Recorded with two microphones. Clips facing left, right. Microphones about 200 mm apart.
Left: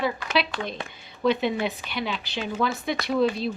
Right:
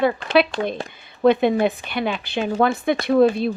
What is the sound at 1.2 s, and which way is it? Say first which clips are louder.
A woman's voice: right 7 dB; 55° right (ahead or behind).